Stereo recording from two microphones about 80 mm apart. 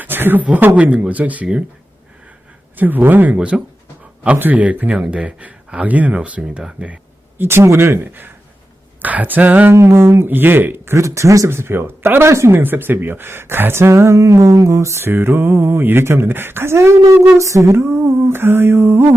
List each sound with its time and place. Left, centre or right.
0.0 s speech: right
2.7 s speech: right
7.4 s speech: right
9.7 s speech: right